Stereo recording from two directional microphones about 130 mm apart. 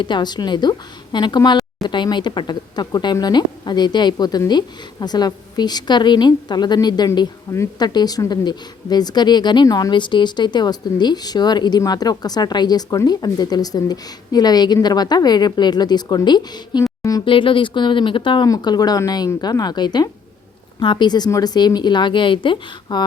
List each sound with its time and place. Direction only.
0.0 s a woman's voice: 35° left (ahead or behind)
17.0 s a sound: 30° left (ahead or behind)
17.2 s a woman's voice: 40° left (ahead or behind)
18.4 s a woman's voice: 30° left (ahead or behind)